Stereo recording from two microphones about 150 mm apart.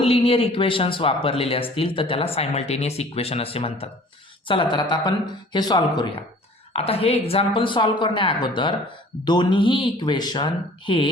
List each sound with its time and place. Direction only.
0.0 s speech: 40° left (ahead or behind)
6.7 s speech: 40° left (ahead or behind)